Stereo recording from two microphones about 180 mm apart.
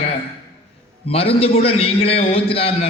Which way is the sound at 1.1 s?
35° left (ahead or behind).